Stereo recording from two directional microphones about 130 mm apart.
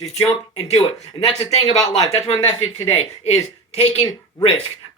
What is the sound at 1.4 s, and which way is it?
A woman's voice, 55° left (ahead or behind).